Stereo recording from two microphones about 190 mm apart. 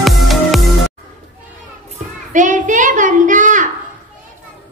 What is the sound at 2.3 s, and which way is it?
Child singing, 40° right (ahead or behind).